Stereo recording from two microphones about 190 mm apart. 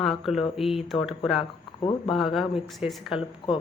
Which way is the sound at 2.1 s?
Centre (ahead or behind).